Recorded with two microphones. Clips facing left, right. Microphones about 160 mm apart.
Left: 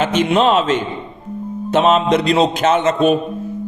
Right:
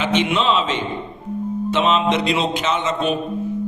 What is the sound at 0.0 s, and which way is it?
A man's voice, 45° left (ahead or behind).